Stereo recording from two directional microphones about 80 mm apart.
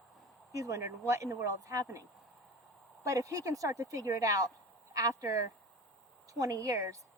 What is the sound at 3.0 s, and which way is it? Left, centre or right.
A woman's voice, right.